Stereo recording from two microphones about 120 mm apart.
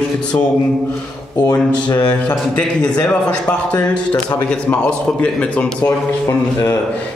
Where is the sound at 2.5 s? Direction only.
10° left (ahead or behind).